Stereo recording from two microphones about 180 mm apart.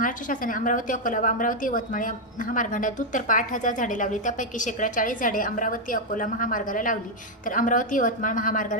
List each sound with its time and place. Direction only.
0.0 s a woman's voice: 50° left (ahead or behind)